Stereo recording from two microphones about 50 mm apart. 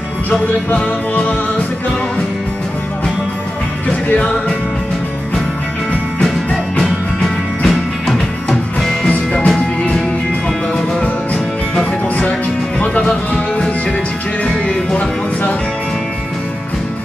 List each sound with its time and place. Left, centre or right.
0.7 s music: left
4.1 s music: left
6.2 s music: centre
9.0 s music: left
11.7 s music: left